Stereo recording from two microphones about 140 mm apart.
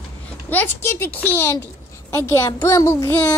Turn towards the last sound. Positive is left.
turn(degrees=15)  # may be behind; listen again after turning